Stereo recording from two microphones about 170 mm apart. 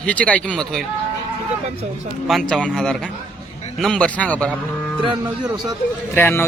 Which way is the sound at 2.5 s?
5° left (ahead or behind).